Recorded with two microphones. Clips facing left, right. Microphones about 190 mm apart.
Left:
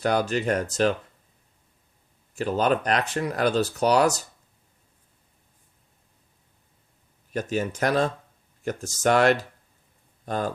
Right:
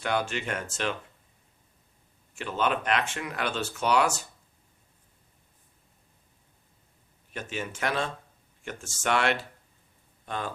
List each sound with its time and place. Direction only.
0.0 s speech: 40° left (ahead or behind)
2.3 s speech: 40° left (ahead or behind)
7.3 s speech: 40° left (ahead or behind)